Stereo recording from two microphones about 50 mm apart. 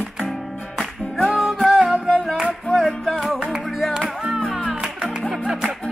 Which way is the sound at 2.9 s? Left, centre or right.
Centre.